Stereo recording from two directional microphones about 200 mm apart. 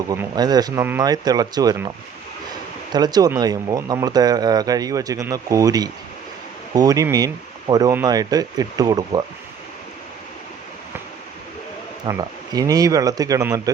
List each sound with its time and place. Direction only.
0.1 s speech: 20° right (ahead or behind)
2.9 s speech: 20° right (ahead or behind)
12.1 s speech: 20° right (ahead or behind)